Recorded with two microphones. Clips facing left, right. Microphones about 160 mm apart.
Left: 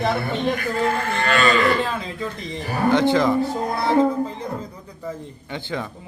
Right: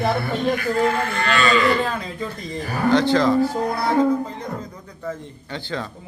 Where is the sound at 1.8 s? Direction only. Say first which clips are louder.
Right 1 dB; centre (ahead or behind).